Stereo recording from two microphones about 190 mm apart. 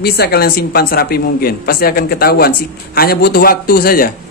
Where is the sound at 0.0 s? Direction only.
55° left (ahead or behind).